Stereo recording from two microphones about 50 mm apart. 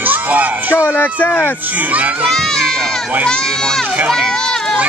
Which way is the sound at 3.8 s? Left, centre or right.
Centre.